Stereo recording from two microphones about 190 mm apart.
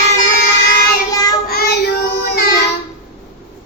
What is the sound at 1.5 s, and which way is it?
Child singing, 55° left (ahead or behind).